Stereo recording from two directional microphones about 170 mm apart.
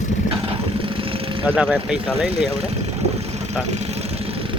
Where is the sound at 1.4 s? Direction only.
5° right (ahead or behind).